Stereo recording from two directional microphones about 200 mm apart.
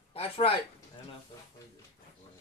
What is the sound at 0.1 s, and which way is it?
Speech, 30° left (ahead or behind).